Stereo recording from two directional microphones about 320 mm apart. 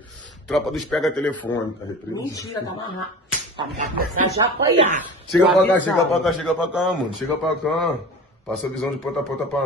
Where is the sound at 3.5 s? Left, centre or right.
Right.